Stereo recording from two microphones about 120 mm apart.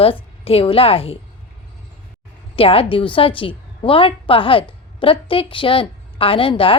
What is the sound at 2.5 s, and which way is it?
A woman's voice, 50° left (ahead or behind).